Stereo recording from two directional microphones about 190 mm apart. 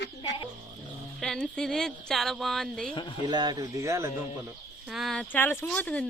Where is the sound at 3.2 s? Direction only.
25° right (ahead or behind).